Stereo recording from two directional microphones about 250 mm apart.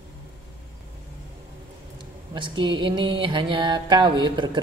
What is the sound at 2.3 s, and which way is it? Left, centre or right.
Music, centre.